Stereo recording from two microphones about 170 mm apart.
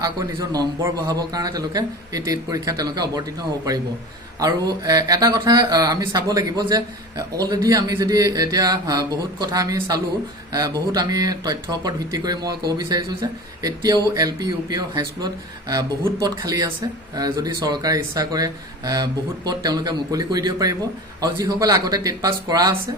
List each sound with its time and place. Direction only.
0.0 s speech: 20° right (ahead or behind)
4.4 s speech: 20° right (ahead or behind)
13.6 s speech: 20° right (ahead or behind)